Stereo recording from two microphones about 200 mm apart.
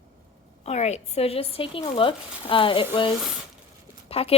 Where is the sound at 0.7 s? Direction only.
35° left (ahead or behind).